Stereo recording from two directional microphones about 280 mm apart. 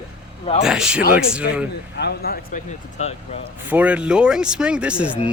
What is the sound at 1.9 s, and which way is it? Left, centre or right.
Speech, left.